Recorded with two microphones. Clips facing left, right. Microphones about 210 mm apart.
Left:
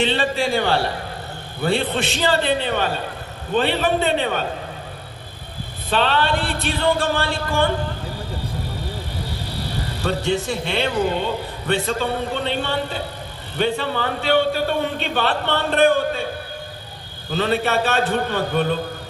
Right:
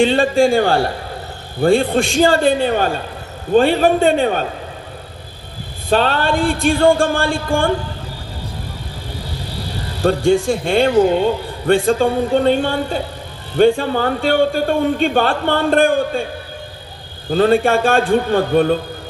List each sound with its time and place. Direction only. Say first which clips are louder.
0.0 s a man's voice: right 8 dB; 45° right (ahead or behind)
5.9 s a man's voice: right 4 dB; 45° right (ahead or behind)
10.0 s a man's voice: right 8 dB; 45° right (ahead or behind)
17.3 s a man's voice: right 7 dB; 45° right (ahead or behind)